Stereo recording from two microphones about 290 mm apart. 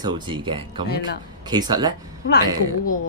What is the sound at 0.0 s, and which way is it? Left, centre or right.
Speech, centre.